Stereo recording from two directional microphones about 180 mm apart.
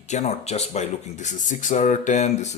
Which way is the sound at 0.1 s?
40° left (ahead or behind).